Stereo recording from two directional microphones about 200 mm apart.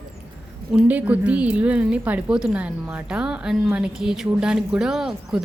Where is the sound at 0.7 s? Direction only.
5° right (ahead or behind).